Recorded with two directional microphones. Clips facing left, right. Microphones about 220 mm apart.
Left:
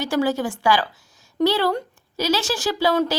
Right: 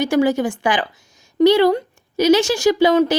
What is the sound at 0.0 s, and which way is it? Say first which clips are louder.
A woman's voice: right 5 dB; 15° right (ahead or behind).